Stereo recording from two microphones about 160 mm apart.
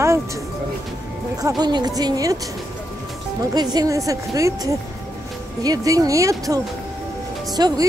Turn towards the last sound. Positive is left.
turn(degrees=-25)  # may be behind; listen again after turning